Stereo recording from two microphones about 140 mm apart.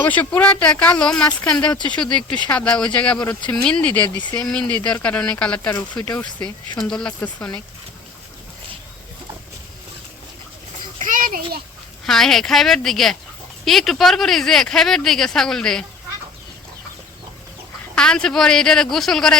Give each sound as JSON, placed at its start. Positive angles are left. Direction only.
{"t": 0.0, "sound": "speech", "side_deg": 10}
{"t": 6.8, "sound": "speech", "side_deg": 5}
{"t": 11.0, "sound": "a sound", "side_deg": -75}
{"t": 12.0, "sound": "speech", "side_deg": 5}
{"t": 17.9, "sound": "speech", "side_deg": 5}